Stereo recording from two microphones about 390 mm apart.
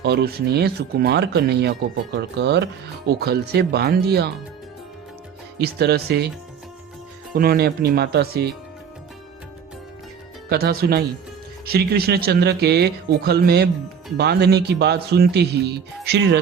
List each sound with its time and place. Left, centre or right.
0.0 s speech: right
5.5 s speech: right
7.3 s speech: right
10.5 s speech: right